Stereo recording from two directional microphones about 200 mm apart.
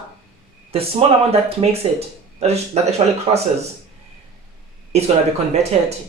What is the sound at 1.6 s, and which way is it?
Speech, 25° right (ahead or behind).